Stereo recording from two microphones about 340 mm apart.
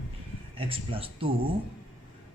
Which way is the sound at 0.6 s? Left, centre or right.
Centre.